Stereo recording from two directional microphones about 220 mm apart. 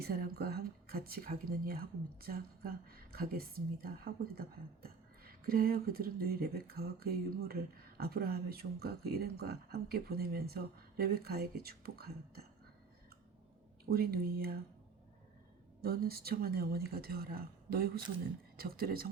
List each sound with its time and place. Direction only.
0.0 s speech: 45° right (ahead or behind)
13.9 s speech: 45° right (ahead or behind)
15.8 s speech: 45° right (ahead or behind)